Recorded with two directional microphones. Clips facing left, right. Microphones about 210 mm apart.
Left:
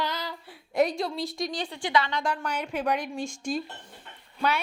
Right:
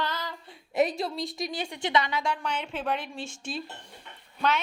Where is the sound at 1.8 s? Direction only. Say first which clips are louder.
Even; 20° right (ahead or behind).